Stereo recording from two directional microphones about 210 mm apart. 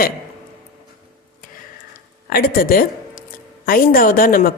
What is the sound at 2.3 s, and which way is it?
A woman's voice, 45° left (ahead or behind).